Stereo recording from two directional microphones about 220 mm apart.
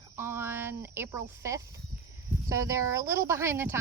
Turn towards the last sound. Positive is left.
turn(degrees=-10)  # may be behind; listen again after turning